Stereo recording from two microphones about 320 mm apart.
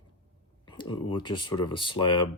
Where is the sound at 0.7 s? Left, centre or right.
Centre.